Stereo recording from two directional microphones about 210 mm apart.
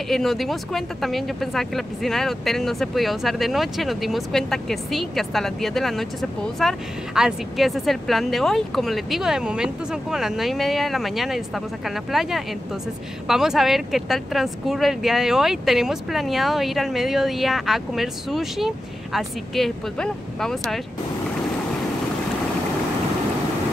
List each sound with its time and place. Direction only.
0.1 s speech: centre (ahead or behind)